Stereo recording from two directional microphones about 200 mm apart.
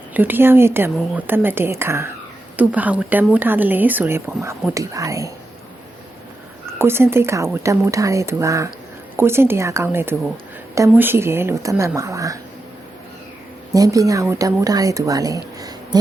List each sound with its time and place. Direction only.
0.1 s speech: 10° right (ahead or behind)
6.7 s speech: 10° right (ahead or behind)
13.7 s speech: 15° right (ahead or behind)